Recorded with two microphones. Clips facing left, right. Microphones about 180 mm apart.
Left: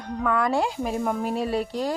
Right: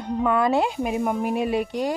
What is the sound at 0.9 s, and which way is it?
Speech, 10° right (ahead or behind).